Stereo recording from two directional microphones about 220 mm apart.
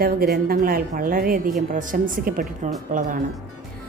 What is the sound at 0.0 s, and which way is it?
Speech, 40° right (ahead or behind).